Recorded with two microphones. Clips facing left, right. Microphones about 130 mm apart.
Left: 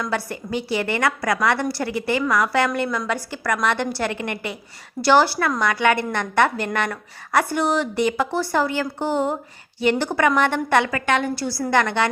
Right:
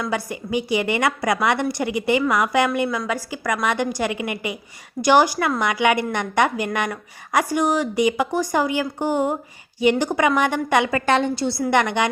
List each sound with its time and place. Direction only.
0.0 s a woman's voice: 10° right (ahead or behind)
10.9 s a woman's voice: 30° right (ahead or behind)